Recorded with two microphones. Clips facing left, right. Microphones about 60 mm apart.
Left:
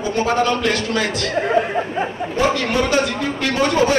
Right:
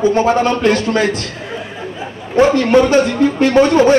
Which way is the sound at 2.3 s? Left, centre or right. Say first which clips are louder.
Right 9 dB; right.